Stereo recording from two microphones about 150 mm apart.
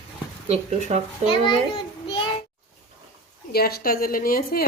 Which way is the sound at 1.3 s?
35° left (ahead or behind).